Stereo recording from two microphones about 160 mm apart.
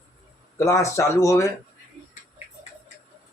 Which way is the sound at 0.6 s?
20° left (ahead or behind).